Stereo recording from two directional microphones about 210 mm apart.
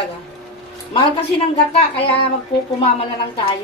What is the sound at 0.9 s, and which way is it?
Speech, 25° left (ahead or behind).